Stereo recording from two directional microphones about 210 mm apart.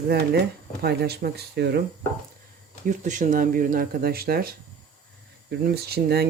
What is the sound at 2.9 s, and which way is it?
Speech, 35° right (ahead or behind).